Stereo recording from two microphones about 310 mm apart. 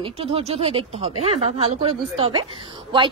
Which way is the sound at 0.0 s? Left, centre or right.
Centre.